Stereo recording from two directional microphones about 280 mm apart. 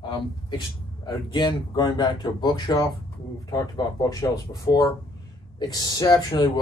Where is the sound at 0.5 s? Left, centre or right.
Centre.